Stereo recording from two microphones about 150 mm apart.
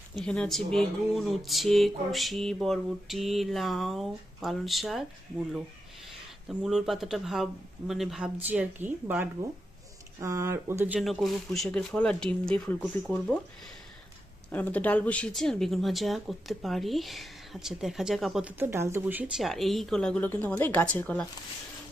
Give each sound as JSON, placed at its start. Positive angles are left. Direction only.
{"t": 0.2, "sound": "speech", "side_deg": 5}
{"t": 6.1, "sound": "speech", "side_deg": -5}
{"t": 11.0, "sound": "speech", "side_deg": 0}
{"t": 14.5, "sound": "speech", "side_deg": 10}
{"t": 18.6, "sound": "speech", "side_deg": -15}
{"t": 19.4, "sound": "a woman's voice", "side_deg": 0}